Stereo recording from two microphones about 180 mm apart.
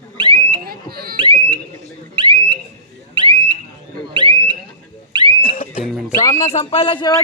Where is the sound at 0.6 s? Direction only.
60° right (ahead or behind).